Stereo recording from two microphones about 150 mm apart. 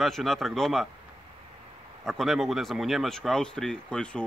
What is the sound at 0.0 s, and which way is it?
Speech, centre (ahead or behind).